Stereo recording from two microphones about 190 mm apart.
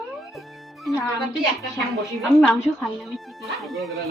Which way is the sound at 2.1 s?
Centre (ahead or behind).